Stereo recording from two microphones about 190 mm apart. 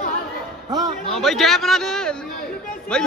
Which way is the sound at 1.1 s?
Centre (ahead or behind).